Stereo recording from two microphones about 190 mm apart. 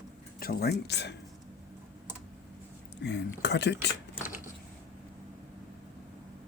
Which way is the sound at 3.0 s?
65° left (ahead or behind).